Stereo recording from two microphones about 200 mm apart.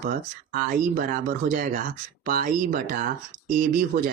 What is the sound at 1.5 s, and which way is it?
Speech, 45° right (ahead or behind).